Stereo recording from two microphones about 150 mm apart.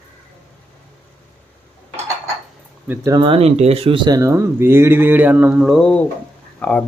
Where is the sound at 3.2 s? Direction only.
40° right (ahead or behind); by 6.8 s 5° left (ahead or behind).